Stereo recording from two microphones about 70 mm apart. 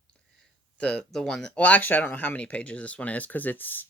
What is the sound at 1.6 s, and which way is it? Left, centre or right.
Speech, left.